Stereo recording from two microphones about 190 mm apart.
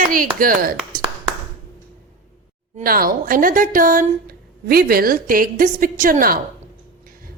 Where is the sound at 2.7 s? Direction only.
50° right (ahead or behind).